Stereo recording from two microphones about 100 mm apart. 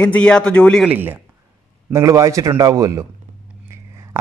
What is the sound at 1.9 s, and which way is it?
A man's voice, 30° right (ahead or behind).